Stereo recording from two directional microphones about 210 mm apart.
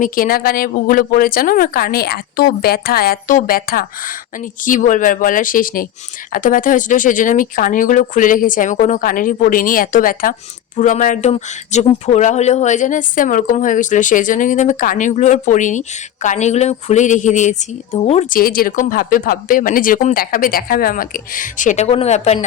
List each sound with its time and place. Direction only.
0.0 s speech: 45° left (ahead or behind)